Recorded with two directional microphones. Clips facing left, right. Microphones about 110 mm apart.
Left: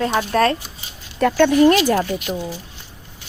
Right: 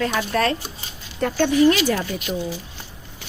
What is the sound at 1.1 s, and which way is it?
Speech, 75° left (ahead or behind).